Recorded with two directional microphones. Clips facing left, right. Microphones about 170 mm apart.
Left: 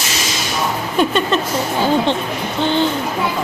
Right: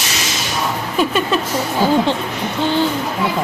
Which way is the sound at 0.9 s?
5° right (ahead or behind).